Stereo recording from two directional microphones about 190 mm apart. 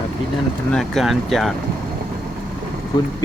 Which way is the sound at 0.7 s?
Centre (ahead or behind).